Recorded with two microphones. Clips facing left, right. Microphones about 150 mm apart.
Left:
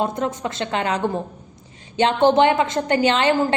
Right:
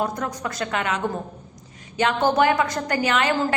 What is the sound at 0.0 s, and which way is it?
A woman's voice, 25° left (ahead or behind).